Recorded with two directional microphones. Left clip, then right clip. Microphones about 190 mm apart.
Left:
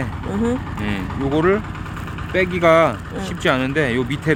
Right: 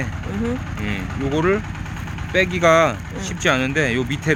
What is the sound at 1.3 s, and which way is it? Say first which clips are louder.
Speech: left 2 dB; 5° left (ahead or behind).